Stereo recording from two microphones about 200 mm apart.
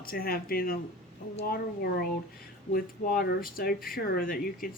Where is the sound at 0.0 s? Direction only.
45° left (ahead or behind).